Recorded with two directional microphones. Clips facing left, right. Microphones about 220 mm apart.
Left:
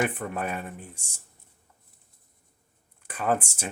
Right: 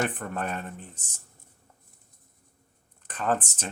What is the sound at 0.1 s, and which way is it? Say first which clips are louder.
Speech: left 1 dB; 10° left (ahead or behind).